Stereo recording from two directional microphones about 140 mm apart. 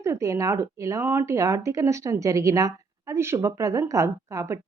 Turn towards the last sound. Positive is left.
turn(degrees=-20)  # may be behind; listen again after turning